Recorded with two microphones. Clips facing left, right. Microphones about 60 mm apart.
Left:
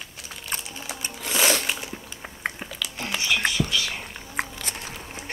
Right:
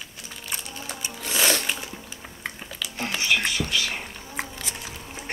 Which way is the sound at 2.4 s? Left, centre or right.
Left.